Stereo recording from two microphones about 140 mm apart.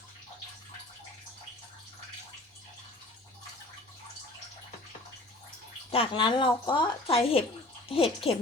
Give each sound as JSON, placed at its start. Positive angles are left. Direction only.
{"t": 5.9, "sound": "speech", "side_deg": 40}